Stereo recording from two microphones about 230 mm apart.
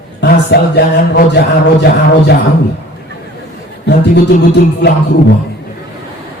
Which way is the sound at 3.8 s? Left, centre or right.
Left.